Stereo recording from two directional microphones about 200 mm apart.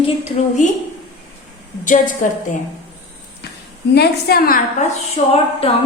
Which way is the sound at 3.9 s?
55° left (ahead or behind).